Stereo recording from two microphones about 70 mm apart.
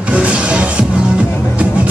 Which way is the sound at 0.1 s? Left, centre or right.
Centre.